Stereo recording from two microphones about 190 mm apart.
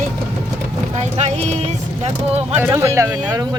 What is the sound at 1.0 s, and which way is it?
Vehicle, 35° right (ahead or behind).